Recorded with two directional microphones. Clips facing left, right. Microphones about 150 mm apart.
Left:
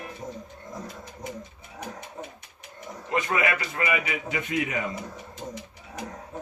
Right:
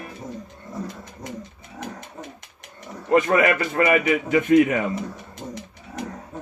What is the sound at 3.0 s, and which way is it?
Speech, 50° right (ahead or behind).